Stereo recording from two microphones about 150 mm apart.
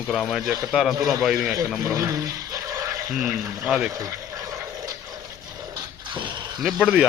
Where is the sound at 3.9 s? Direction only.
25° right (ahead or behind).